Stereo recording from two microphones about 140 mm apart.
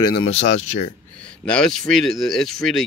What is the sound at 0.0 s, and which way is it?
Speech, 35° left (ahead or behind).